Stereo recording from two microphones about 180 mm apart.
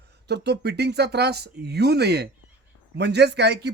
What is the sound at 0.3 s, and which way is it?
Speech, 70° right (ahead or behind).